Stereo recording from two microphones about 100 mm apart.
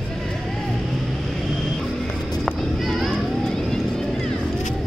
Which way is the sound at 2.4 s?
Centre (ahead or behind).